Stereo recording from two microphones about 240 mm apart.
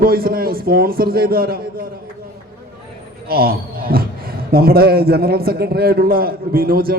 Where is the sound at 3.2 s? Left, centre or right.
Right.